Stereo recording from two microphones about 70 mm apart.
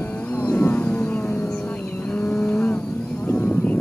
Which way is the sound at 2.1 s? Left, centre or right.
Left.